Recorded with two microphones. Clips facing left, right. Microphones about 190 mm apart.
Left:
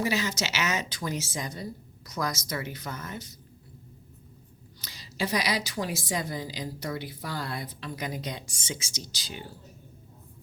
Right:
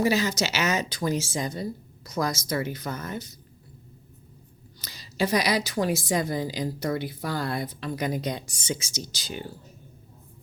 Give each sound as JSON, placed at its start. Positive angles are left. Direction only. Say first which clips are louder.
{"t": 0.0, "sound": "a woman's voice", "louder": "right 5 dB", "side_deg": -40}
{"t": 4.8, "sound": "a woman's voice", "louder": "right 5 dB", "side_deg": -40}